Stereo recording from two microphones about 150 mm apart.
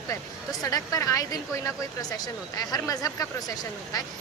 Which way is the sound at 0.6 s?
25° left (ahead or behind).